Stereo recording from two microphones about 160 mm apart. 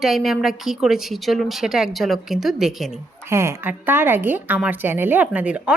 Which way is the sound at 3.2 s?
15° right (ahead or behind).